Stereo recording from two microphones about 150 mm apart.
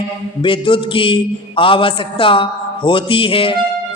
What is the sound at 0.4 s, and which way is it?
A man's voice, 35° left (ahead or behind).